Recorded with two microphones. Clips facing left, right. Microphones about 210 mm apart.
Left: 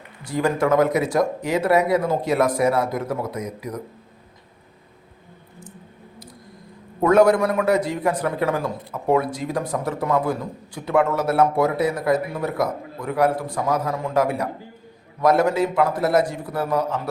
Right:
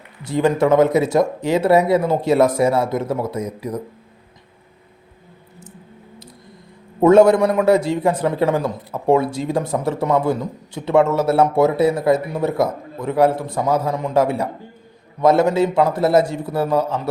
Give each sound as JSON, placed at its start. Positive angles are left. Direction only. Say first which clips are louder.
{"t": 0.3, "sound": "a man's voice", "louder": "right 4 dB", "side_deg": -25}
{"t": 7.0, "sound": "a man's voice", "louder": "right 4 dB", "side_deg": -25}